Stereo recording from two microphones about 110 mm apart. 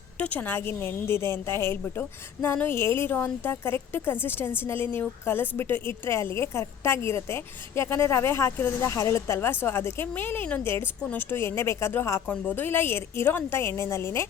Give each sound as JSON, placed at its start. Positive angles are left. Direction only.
{"t": 0.2, "sound": "a woman's voice", "side_deg": 15}